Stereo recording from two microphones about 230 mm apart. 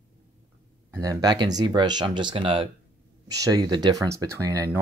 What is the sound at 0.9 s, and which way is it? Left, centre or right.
Speech, centre.